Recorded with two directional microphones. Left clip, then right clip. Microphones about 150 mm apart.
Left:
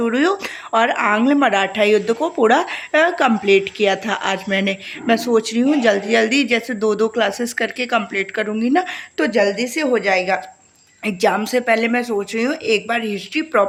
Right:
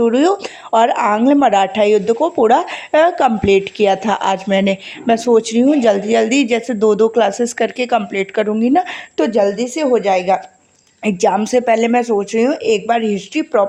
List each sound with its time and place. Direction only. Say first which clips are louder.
0.0 s speech: right 4 dB; 25° right (ahead or behind); by 9.2 s 45° right (ahead or behind)
9.2 s speech: right 2 dB; 30° right (ahead or behind)